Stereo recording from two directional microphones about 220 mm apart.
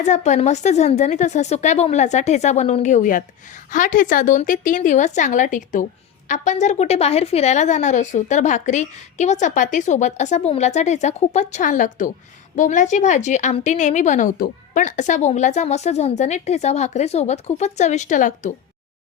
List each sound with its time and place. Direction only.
0.0 s a woman's voice: 30° left (ahead or behind)